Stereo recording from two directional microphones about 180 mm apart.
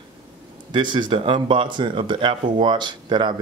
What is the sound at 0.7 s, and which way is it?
Speech, 25° right (ahead or behind).